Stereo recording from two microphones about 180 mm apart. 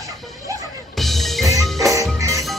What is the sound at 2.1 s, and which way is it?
Music, 20° right (ahead or behind).